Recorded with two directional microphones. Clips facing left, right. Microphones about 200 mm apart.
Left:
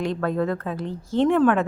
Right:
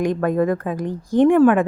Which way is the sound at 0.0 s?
15° right (ahead or behind).